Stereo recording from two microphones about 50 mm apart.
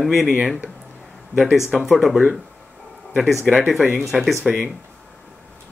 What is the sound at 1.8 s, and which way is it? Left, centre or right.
Speech, centre.